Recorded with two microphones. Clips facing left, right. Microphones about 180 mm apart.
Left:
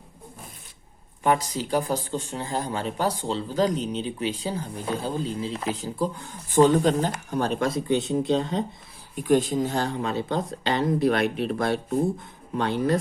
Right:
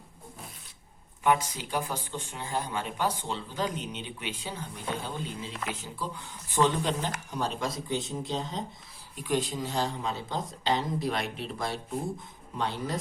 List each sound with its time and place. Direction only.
1.2 s speech: 40° left (ahead or behind)
7.3 s speech: 60° left (ahead or behind)
9.1 s speech: 50° left (ahead or behind)